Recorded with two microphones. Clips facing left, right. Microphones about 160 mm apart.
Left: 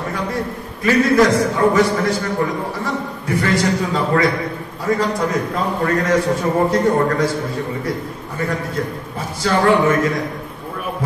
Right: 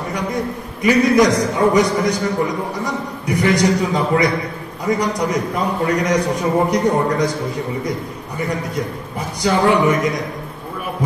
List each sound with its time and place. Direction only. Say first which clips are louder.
0.8 s a man's voice: right 1 dB; 15° right (ahead or behind)
9.4 s a man's voice: even; 15° right (ahead or behind)
11.0 s a sound: right 2 dB; 15° right (ahead or behind)